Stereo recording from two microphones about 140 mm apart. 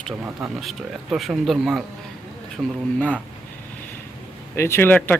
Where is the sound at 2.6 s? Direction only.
15° right (ahead or behind).